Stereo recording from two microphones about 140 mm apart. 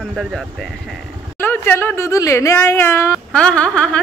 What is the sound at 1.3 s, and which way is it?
Speech, 15° left (ahead or behind).